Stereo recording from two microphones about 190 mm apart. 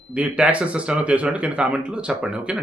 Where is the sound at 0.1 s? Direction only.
5° right (ahead or behind).